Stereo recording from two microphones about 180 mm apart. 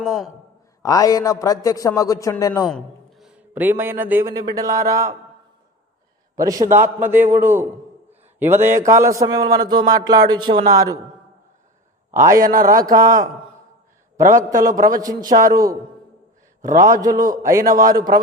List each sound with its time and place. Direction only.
0.0 s a man's voice: centre (ahead or behind)
0.8 s a man's voice: 20° left (ahead or behind)
2.6 s a man's voice: centre (ahead or behind); by 5.1 s 20° right (ahead or behind)
6.3 s a man's voice: 20° right (ahead or behind)
12.1 s a man's voice: 15° right (ahead or behind)
14.2 s a man's voice: 15° right (ahead or behind)
16.7 s a man's voice: 20° right (ahead or behind)